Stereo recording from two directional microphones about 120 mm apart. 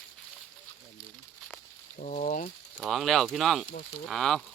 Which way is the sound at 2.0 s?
85° left.